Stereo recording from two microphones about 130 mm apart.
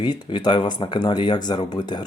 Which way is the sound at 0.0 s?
35° left (ahead or behind).